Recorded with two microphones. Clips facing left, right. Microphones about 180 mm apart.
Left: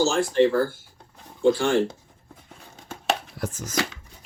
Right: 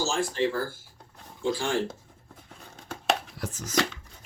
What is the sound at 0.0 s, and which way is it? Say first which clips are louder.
Speech: left 7 dB; 70° left (ahead or behind).